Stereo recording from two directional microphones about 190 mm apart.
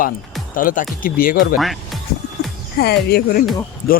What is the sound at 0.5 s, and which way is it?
Speech, 45° left (ahead or behind).